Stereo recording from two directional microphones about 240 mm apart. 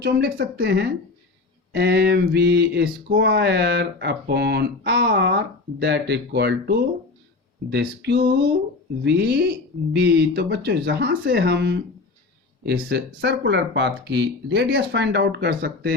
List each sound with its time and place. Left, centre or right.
0.0 s a woman's voice: right